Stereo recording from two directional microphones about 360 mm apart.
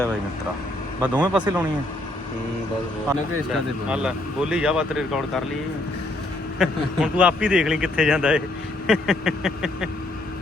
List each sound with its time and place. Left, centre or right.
1.0 s a man's voice: centre
3.8 s a man's voice: centre
6.6 s a man's voice: centre